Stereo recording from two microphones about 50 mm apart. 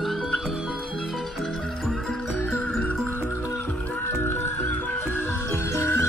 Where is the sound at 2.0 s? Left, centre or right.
Left.